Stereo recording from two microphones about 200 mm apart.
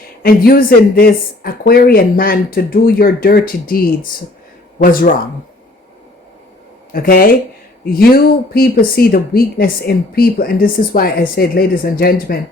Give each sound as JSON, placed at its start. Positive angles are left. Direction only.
{"t": 0.2, "sound": "speech", "side_deg": 45}
{"t": 6.9, "sound": "speech", "side_deg": 45}